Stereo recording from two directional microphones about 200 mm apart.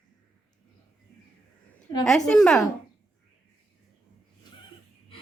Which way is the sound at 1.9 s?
20° left (ahead or behind).